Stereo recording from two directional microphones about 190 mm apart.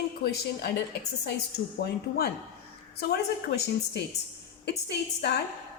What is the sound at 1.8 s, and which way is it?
A woman's voice, 55° left (ahead or behind).